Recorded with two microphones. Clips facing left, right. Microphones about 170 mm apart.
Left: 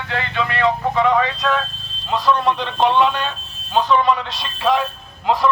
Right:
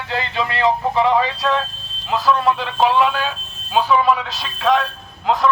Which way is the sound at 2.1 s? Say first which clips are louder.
Right 1 dB; centre (ahead or behind).